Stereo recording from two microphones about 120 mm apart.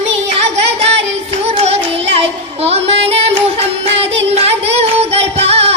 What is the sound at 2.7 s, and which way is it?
Child singing, 60° right (ahead or behind).